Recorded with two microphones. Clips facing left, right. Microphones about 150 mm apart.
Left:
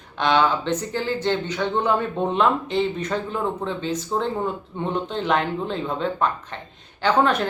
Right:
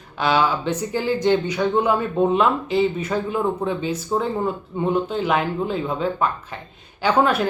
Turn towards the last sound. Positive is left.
turn(degrees=-10)  # may be behind; listen again after turning